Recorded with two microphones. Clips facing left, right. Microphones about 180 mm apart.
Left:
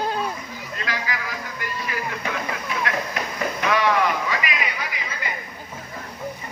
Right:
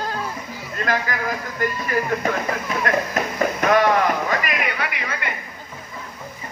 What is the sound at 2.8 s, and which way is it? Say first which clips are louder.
Music: right 6 dB; 45° right (ahead or behind).